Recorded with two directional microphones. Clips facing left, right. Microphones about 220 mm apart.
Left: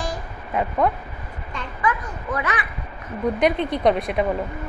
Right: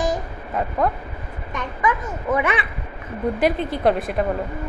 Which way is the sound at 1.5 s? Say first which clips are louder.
Right 2 dB; 25° right (ahead or behind).